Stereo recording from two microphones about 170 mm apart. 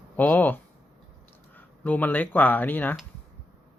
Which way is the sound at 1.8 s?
10° left (ahead or behind).